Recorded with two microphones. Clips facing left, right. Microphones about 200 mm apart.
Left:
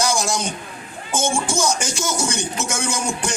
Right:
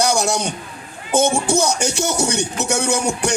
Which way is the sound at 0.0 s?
65° right (ahead or behind).